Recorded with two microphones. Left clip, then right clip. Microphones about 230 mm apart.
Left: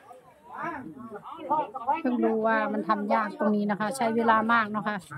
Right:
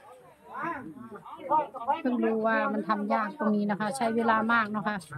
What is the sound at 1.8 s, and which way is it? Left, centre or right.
Speech, centre.